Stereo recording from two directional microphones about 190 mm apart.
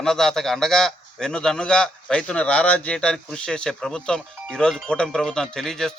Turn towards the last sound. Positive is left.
turn(degrees=0)  # may be behind; listen again after turning